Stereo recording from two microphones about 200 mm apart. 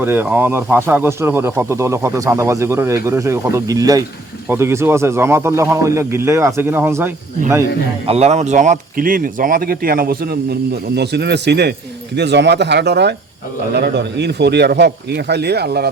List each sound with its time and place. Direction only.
0.0 s speech: 10° right (ahead or behind)
8.0 s speech: 30° right (ahead or behind); by 15.9 s 55° right (ahead or behind)